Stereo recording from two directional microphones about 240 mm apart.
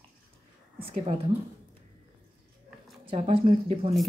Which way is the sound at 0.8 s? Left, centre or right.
Right.